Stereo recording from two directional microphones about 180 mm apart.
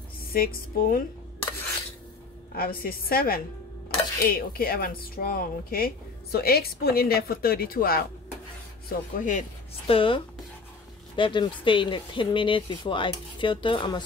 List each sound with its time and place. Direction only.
0.3 s speech: 55° left (ahead or behind)
2.5 s speech: 55° left (ahead or behind)
8.8 s speech: 45° left (ahead or behind)
9.8 s speech: 30° left (ahead or behind)